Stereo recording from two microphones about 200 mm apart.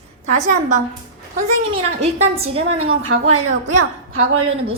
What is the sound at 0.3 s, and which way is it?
Speech, 35° right (ahead or behind).